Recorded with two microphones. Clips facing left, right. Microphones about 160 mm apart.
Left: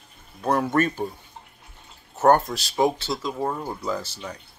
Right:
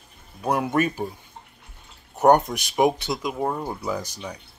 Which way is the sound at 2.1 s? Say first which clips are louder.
Right 1 dB; 15° right (ahead or behind).